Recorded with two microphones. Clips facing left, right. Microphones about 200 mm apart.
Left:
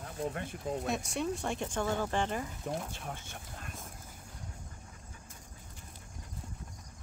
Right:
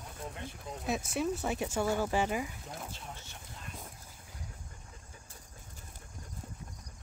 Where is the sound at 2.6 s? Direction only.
55° left (ahead or behind).